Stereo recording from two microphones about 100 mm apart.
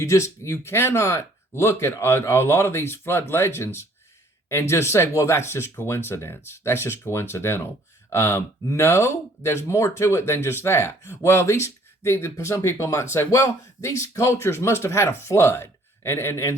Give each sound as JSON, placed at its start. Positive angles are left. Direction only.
{"t": 0.0, "sound": "speech", "side_deg": 30}